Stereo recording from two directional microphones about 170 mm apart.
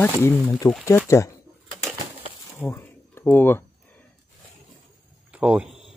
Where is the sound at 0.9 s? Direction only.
15° left (ahead or behind).